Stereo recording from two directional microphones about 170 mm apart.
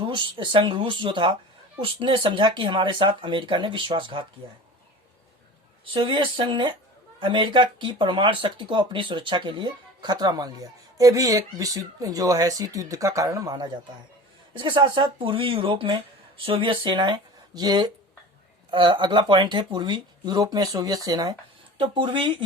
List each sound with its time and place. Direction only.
0.0 s speech: 30° right (ahead or behind)
5.9 s speech: 30° right (ahead or behind)